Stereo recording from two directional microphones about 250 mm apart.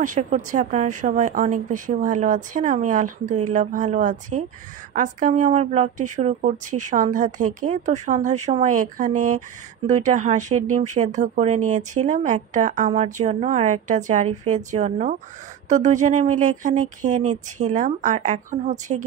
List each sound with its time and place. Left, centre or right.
0.0 s a woman's voice: right